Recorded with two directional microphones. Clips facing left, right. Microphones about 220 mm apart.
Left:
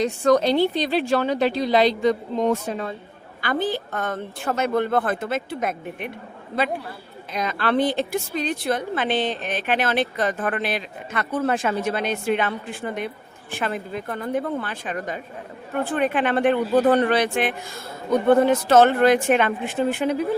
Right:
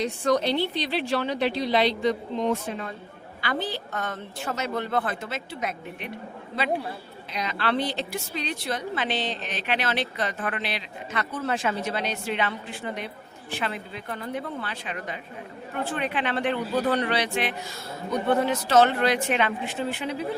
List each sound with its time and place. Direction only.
0.0 s a woman's voice: 45° left (ahead or behind)
7.3 s a woman's voice: 50° left (ahead or behind)